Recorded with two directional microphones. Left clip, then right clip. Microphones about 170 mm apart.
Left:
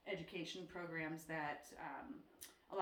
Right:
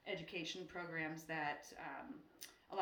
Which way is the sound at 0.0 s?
20° right (ahead or behind).